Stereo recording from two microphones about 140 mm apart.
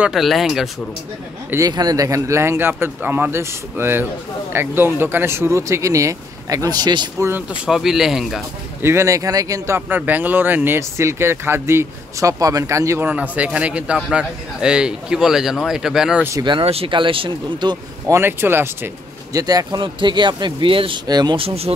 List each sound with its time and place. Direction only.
0.0 s a man's voice: centre (ahead or behind)
1.7 s speech: 30° right (ahead or behind)
7.2 s a man's voice: 15° right (ahead or behind)
8.8 s speech: 20° right (ahead or behind)
13.1 s a man's voice: 10° right (ahead or behind)
16.3 s speech: 30° right (ahead or behind)
18.1 s speech: 15° right (ahead or behind)
19.3 s speech: 25° right (ahead or behind)
21.5 s speech: 45° right (ahead or behind)